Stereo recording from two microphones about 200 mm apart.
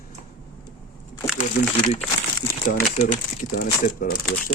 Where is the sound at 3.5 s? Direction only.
45° left (ahead or behind).